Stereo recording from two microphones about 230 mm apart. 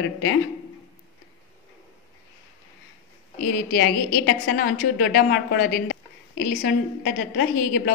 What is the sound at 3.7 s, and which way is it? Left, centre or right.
A woman's voice, left.